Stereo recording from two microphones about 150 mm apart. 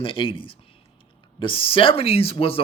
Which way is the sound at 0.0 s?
35° left (ahead or behind).